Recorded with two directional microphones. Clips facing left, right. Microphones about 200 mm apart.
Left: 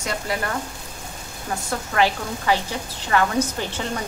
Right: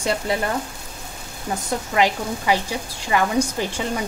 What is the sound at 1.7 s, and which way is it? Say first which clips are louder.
A woman's voice: right 1 dB; 15° right (ahead or behind).